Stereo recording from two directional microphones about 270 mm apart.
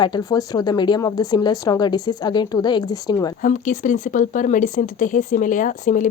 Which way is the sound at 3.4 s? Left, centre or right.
Left.